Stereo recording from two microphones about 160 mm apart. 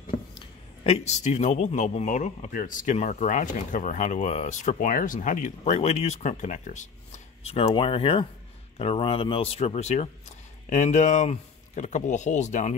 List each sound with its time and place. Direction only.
0.3 s a man's voice: 35° left (ahead or behind)